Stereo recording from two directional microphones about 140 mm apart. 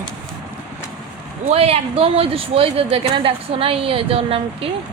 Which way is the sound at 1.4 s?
45° right (ahead or behind).